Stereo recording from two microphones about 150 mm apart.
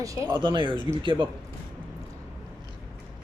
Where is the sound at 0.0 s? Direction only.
20° right (ahead or behind).